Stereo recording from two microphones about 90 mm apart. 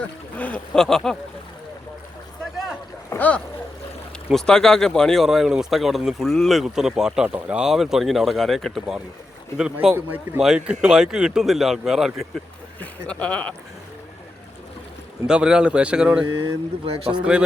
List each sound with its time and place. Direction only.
0.3 s speech: 15° left (ahead or behind)
3.1 s speech: 15° left (ahead or behind)
4.3 s speech: 5° left (ahead or behind)
9.9 s speech: 20° right (ahead or behind)
10.4 s speech: 10° right (ahead or behind)
13.1 s speech: 10° left (ahead or behind)
15.3 s a man's voice: 10° right (ahead or behind)
16.2 s speech: 65° right (ahead or behind)
17.1 s a man's voice: 10° right (ahead or behind)